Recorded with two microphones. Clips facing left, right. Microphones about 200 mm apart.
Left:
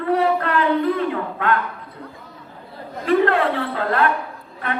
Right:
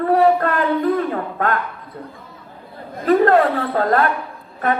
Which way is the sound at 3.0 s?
40° right (ahead or behind).